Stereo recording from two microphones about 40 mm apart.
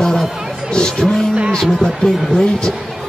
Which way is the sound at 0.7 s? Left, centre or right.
Centre.